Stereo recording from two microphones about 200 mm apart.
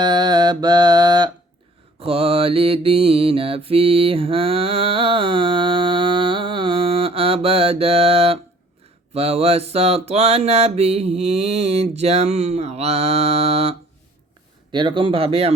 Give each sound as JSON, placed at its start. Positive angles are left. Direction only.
{"t": 0.0, "sound": "mantra", "side_deg": -20}